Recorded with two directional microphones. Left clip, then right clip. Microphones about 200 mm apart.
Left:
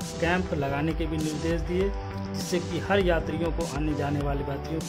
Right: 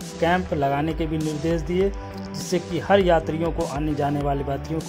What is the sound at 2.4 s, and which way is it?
Speech, 15° right (ahead or behind).